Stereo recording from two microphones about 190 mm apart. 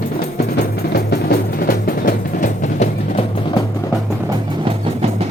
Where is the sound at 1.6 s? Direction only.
45° left (ahead or behind).